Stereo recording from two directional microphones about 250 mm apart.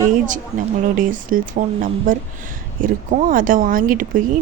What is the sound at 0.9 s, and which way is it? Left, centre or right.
Speech, right.